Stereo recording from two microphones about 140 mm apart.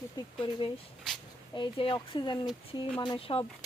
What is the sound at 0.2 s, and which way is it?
A woman's voice, 35° left (ahead or behind).